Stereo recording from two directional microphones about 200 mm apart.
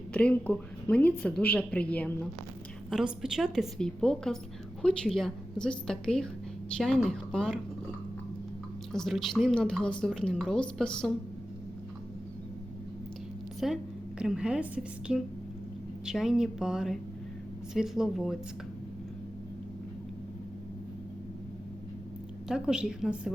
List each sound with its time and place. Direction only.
0.1 s a woman's voice: 5° left (ahead or behind)
2.9 s a woman's voice: 5° right (ahead or behind)
8.9 s a woman's voice: centre (ahead or behind)
13.6 s a woman's voice: centre (ahead or behind)
22.4 s a woman's voice: 5° right (ahead or behind)